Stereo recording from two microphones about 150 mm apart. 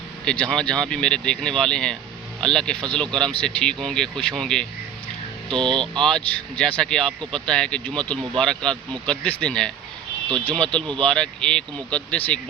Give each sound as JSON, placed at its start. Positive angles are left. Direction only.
{"t": 0.3, "sound": "speech", "side_deg": 5}
{"t": 5.7, "sound": "speech", "side_deg": -35}
{"t": 6.0, "sound": "speech", "side_deg": 5}